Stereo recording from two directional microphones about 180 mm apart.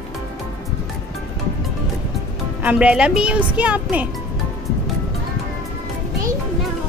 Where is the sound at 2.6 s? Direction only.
10° right (ahead or behind).